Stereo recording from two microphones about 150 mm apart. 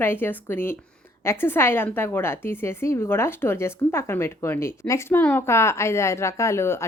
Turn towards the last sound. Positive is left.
turn(degrees=15)  # may be behind; listen again after turning